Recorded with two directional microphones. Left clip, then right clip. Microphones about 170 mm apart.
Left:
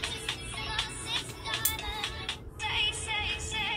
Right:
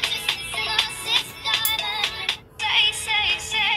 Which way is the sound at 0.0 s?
45° right (ahead or behind).